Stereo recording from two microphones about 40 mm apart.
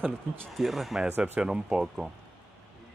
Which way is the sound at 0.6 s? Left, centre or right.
Centre.